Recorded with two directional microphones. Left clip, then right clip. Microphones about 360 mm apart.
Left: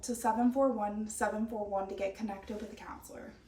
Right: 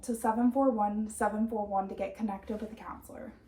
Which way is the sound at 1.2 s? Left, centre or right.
Centre.